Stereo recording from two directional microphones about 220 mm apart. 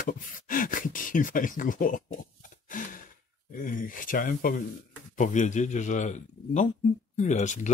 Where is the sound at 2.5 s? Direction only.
35° left (ahead or behind).